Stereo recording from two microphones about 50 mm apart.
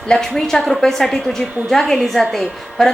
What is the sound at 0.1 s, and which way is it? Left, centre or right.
A woman's voice, centre.